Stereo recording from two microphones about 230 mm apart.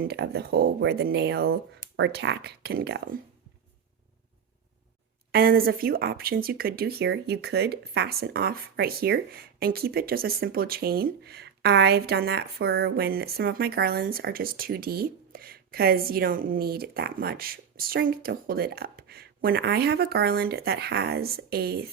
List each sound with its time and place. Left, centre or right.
0.0 s speech: right
5.3 s a woman's voice: right